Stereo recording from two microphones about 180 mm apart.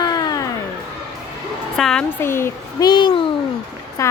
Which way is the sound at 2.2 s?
15° left (ahead or behind).